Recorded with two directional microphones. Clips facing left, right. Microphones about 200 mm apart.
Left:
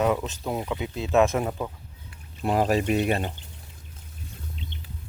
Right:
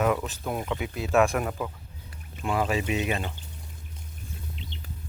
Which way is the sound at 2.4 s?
40° left (ahead or behind).